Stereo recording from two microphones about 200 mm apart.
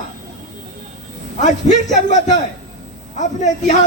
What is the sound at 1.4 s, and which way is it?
Speech, 40° left (ahead or behind).